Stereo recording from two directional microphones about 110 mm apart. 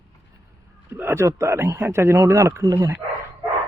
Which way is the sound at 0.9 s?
20° right (ahead or behind).